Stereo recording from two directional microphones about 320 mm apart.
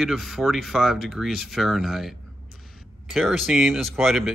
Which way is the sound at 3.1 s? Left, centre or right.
Centre.